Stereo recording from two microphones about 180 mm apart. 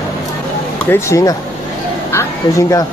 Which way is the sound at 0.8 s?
15° left (ahead or behind).